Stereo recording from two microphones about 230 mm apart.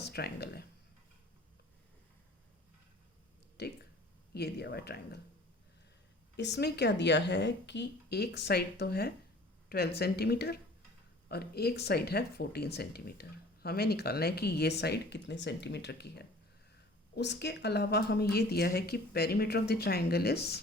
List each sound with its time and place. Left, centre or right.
0.0 s speech: left
3.6 s a sound: left
4.4 s speech: left
6.3 s speech: left